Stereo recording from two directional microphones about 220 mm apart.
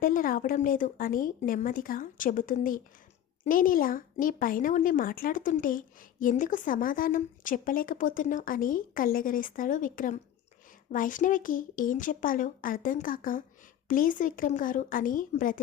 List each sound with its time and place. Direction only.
0.0 s speech: 40° left (ahead or behind)